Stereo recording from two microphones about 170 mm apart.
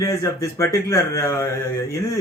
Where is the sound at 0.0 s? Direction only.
15° left (ahead or behind).